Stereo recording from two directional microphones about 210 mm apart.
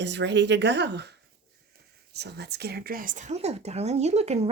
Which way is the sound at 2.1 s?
50° right (ahead or behind).